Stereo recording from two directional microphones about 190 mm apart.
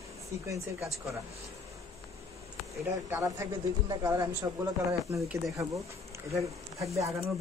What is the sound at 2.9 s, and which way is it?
Speech, 15° right (ahead or behind).